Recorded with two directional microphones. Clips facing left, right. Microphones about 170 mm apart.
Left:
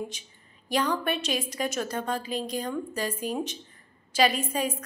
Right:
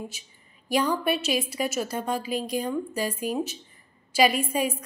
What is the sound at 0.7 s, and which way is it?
A woman's voice, 10° right (ahead or behind).